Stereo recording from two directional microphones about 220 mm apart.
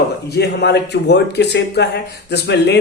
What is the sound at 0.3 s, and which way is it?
Speech, 50° left (ahead or behind).